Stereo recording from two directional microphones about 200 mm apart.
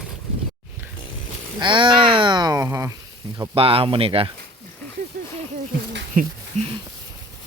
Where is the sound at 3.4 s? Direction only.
25° right (ahead or behind).